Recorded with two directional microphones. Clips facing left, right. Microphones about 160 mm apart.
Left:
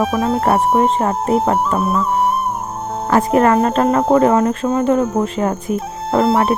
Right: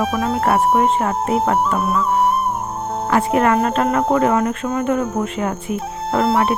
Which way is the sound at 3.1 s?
35° left (ahead or behind).